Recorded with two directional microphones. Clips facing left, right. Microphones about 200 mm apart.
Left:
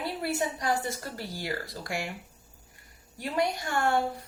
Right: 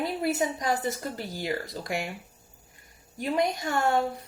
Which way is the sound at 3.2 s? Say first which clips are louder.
Right 2 dB; 20° right (ahead or behind).